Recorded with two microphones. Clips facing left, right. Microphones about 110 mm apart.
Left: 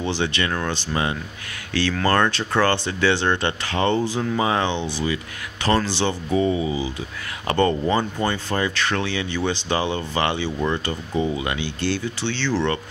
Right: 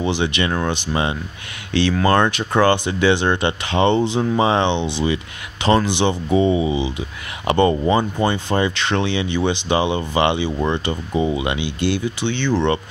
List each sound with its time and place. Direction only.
0.0 s speech: 15° right (ahead or behind)